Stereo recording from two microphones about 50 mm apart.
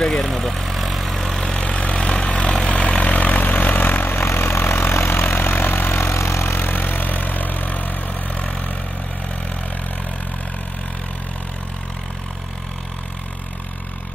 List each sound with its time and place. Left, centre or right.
0.0 s vehicle: centre
1.6 s vehicle: left
3.4 s vehicle: left
6.1 s vehicle: left